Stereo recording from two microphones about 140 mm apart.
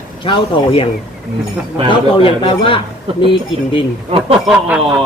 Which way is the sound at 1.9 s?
40° left (ahead or behind).